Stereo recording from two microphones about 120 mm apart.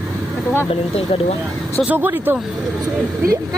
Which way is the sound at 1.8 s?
15° right (ahead or behind).